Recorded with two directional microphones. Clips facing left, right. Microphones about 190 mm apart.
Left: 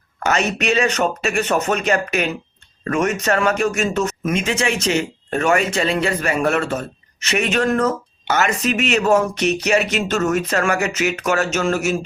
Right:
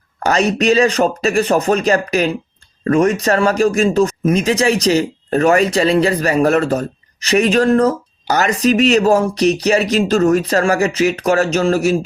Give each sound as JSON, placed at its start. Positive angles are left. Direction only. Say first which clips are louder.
{"t": 0.2, "sound": "speech", "louder": "right 5 dB", "side_deg": -35}